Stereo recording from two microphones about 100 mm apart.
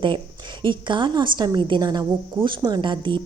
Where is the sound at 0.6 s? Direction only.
55° right (ahead or behind).